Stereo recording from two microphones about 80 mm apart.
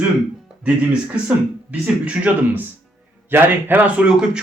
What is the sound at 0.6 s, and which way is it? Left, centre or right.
A man's voice, centre.